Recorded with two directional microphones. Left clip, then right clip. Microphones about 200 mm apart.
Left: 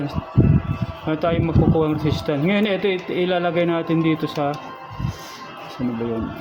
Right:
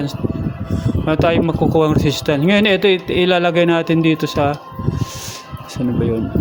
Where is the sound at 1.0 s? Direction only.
40° right (ahead or behind).